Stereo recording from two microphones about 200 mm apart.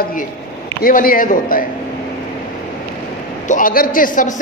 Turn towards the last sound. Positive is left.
turn(degrees=40)  # may be behind; listen again after turning